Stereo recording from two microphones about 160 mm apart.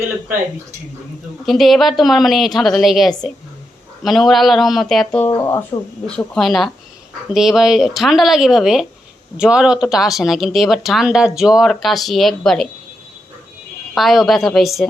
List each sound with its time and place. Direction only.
1.5 s speech: centre (ahead or behind)
5.2 s speech: 15° left (ahead or behind)
6.1 s speech: 5° left (ahead or behind)
13.9 s speech: centre (ahead or behind)